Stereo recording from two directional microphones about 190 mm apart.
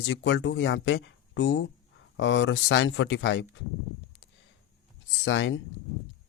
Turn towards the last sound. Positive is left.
turn(degrees=75)  # may be behind; listen again after turning